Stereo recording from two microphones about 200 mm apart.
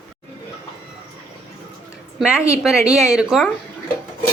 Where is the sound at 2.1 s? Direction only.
5° right (ahead or behind).